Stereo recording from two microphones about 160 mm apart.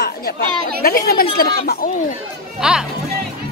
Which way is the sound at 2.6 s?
5° right (ahead or behind).